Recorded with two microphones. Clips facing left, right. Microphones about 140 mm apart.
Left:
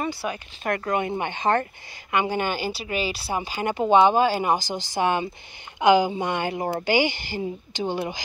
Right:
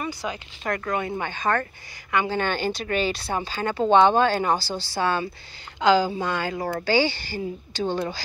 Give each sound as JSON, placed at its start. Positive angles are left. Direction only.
{"t": 0.2, "sound": "a woman's voice", "side_deg": 20}